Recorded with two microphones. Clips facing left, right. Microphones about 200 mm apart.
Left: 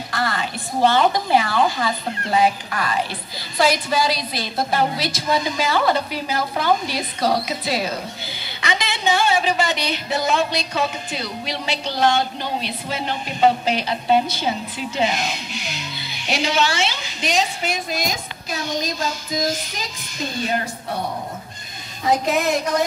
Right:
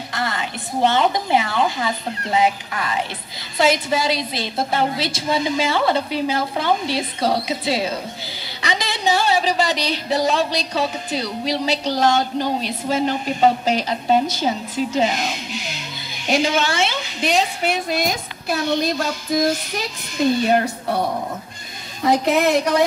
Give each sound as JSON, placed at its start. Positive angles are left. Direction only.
{"t": 0.1, "sound": "a woman's voice", "side_deg": -20}
{"t": 16.3, "sound": "a woman's voice", "side_deg": -50}
{"t": 17.3, "sound": "a woman's voice", "side_deg": -60}
{"t": 22.2, "sound": "a woman's voice", "side_deg": -60}